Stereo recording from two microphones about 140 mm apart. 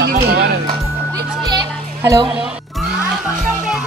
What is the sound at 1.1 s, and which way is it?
Music, 25° right (ahead or behind).